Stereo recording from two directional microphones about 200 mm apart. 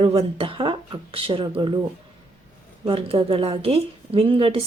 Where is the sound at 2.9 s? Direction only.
30° right (ahead or behind).